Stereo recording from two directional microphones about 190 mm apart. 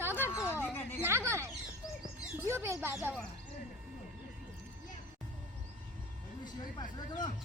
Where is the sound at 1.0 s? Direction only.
15° right (ahead or behind).